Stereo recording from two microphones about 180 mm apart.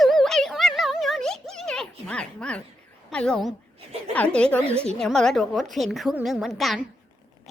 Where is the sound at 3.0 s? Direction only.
5° left (ahead or behind).